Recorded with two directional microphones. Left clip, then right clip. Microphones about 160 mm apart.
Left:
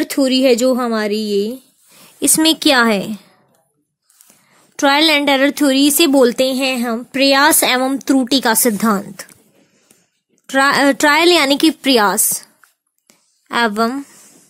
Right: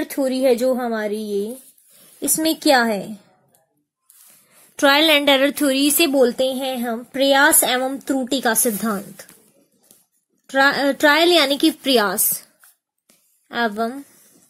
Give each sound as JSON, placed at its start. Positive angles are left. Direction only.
{"t": 0.0, "sound": "a woman's voice", "side_deg": 65}
{"t": 2.1, "sound": "a woman's voice", "side_deg": 45}
{"t": 4.7, "sound": "a woman's voice", "side_deg": 20}
{"t": 6.1, "sound": "a woman's voice", "side_deg": 50}
{"t": 10.4, "sound": "a woman's voice", "side_deg": 40}
{"t": 13.5, "sound": "speech", "side_deg": 45}